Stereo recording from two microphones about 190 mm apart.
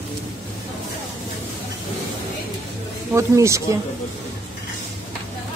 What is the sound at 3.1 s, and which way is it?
Speech, 15° right (ahead or behind).